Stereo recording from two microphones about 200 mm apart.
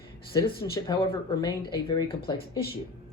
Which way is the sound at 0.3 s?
25° left (ahead or behind).